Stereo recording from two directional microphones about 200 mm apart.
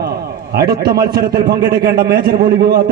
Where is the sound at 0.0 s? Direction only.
50° right (ahead or behind).